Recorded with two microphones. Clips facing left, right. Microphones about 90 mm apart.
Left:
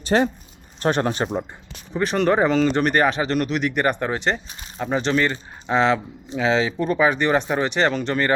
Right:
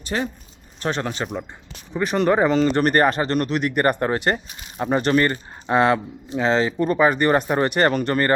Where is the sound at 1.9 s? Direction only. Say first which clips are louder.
Even; 5° right (ahead or behind).